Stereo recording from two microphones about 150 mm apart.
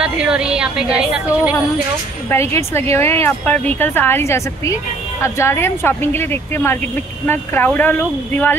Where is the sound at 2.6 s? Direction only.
15° left (ahead or behind).